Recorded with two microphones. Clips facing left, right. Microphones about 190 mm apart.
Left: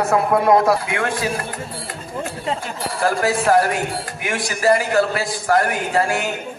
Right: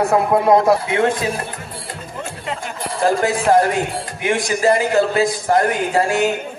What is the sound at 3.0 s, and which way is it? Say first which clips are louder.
A man's voice: right 2 dB; 20° right (ahead or behind).